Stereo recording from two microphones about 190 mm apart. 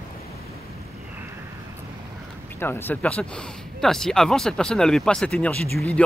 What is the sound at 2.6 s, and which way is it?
Speech, 10° left (ahead or behind).